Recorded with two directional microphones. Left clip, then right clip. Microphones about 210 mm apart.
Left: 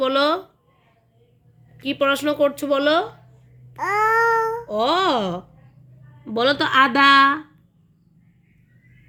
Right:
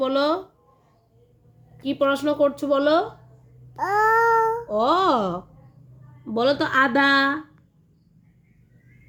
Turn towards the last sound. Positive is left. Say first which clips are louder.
# left 5 dB
turn(degrees=25)  # may be behind; listen again after turning